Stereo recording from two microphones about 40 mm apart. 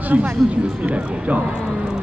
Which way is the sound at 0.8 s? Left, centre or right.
Right.